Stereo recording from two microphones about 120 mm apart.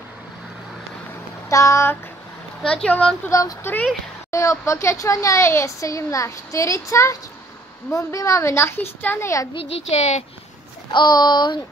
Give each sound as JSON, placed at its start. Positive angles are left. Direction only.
{"t": 1.5, "sound": "speech", "side_deg": 25}
{"t": 2.6, "sound": "speech", "side_deg": 5}
{"t": 3.3, "sound": "speech", "side_deg": 30}
{"t": 9.5, "sound": "a child's voice", "side_deg": 55}
{"t": 10.9, "sound": "a sound", "side_deg": 40}